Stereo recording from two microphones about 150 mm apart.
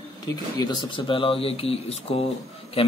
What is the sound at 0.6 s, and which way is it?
Speech, 30° left (ahead or behind).